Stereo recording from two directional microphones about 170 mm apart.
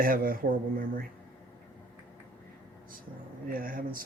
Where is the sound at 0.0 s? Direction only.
55° right (ahead or behind).